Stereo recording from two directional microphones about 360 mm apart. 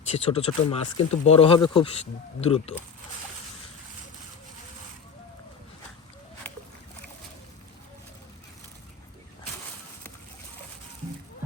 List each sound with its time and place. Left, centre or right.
0.1 s speech: centre